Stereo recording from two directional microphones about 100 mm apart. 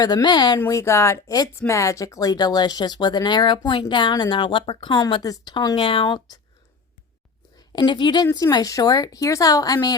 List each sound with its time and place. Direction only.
0.0 s speech: 45° left (ahead or behind)
0.6 s a woman's voice: 30° left (ahead or behind)
5.7 s speech: 60° left (ahead or behind); by 6.4 s 45° left (ahead or behind)
7.7 s speech: 50° left (ahead or behind)